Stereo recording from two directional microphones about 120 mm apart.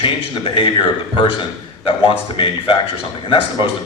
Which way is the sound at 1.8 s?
45° left (ahead or behind).